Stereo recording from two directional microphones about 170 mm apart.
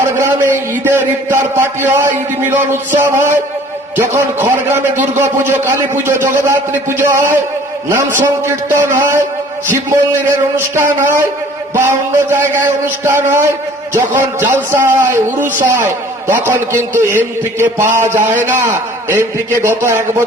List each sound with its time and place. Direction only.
0.2 s a man's voice: 10° right (ahead or behind)